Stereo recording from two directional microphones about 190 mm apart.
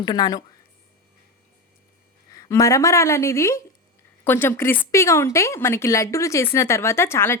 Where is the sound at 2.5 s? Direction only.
15° left (ahead or behind).